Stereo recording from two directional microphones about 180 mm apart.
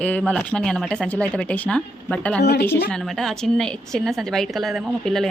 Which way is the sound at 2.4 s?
65° left (ahead or behind).